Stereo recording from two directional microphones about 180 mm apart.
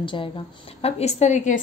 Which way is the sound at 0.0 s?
25° left (ahead or behind).